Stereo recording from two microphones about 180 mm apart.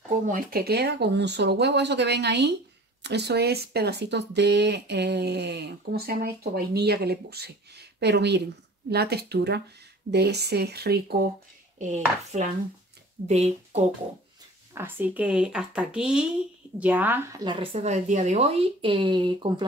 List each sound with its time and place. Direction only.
0.3 s speech: 55° right (ahead or behind)
11.8 s speech: 40° right (ahead or behind)
14.7 s a woman's voice: 10° right (ahead or behind)
17.7 s speech: 40° right (ahead or behind)